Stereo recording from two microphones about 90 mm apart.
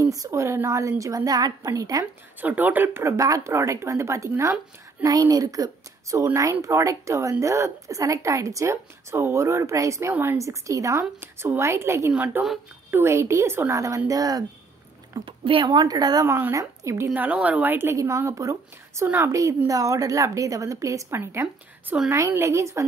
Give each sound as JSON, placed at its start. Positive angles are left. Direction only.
{"t": 0.0, "sound": "a woman's voice", "side_deg": -40}
{"t": 2.4, "sound": "a woman's voice", "side_deg": -20}
{"t": 15.2, "sound": "speech", "side_deg": -70}
{"t": 16.3, "sound": "a woman's voice", "side_deg": -25}
{"t": 17.9, "sound": "a woman's voice", "side_deg": -35}